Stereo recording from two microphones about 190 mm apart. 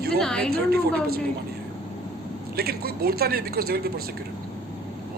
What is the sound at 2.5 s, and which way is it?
Speech, 55° right (ahead or behind).